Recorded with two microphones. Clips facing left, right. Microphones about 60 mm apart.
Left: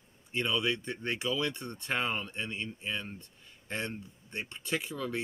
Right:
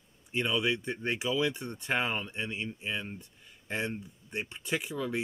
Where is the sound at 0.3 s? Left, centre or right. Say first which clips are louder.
Right 1 dB; centre.